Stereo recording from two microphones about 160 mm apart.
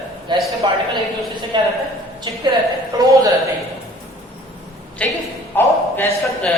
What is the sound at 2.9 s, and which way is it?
Speech, 20° right (ahead or behind).